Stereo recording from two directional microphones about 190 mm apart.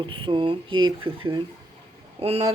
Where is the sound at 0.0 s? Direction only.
25° right (ahead or behind).